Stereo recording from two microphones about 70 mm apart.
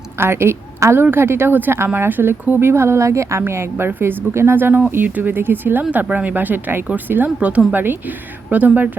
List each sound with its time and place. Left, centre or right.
0.2 s a woman's voice: right
2.6 s a woman's voice: right